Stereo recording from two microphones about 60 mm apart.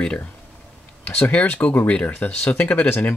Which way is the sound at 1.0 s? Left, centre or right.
Left.